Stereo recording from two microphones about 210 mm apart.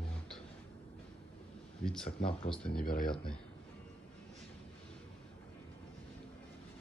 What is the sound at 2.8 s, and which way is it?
Speech, 45° left (ahead or behind).